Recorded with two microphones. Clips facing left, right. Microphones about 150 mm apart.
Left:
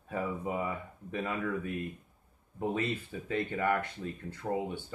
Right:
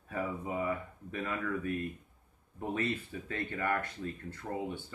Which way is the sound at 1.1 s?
20° left (ahead or behind).